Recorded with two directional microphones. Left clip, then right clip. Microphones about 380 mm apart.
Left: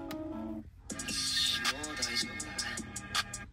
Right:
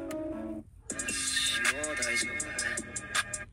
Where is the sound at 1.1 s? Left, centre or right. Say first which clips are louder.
Right 1 dB; centre.